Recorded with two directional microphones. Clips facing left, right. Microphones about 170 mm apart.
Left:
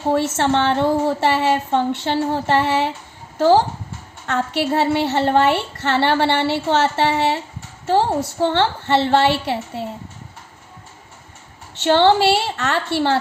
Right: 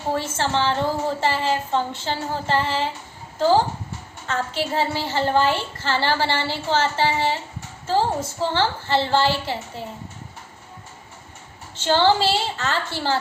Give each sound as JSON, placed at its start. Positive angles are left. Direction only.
{"t": 0.1, "sound": "a woman's voice", "side_deg": 70}
{"t": 11.7, "sound": "a woman's voice", "side_deg": 65}